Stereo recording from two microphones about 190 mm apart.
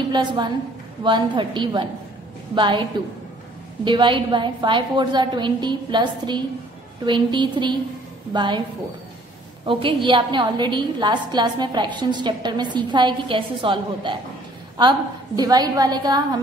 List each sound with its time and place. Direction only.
0.1 s a woman's voice: 25° right (ahead or behind)
9.7 s a woman's voice: 25° right (ahead or behind)